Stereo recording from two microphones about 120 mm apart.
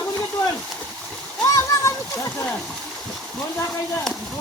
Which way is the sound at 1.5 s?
25° left (ahead or behind).